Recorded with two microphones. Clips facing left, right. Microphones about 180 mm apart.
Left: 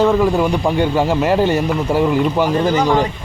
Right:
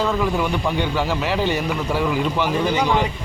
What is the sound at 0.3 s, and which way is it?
A man's voice, 45° left (ahead or behind).